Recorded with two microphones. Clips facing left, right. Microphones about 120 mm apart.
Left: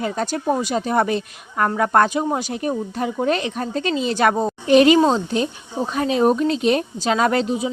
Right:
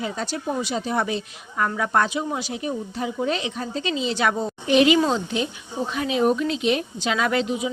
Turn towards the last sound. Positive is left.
turn(degrees=35)  # may be behind; listen again after turning